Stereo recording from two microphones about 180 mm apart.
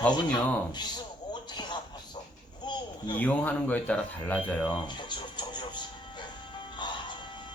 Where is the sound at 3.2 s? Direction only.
10° left (ahead or behind).